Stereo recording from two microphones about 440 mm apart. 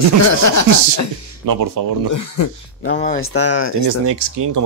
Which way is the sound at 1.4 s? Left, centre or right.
Right.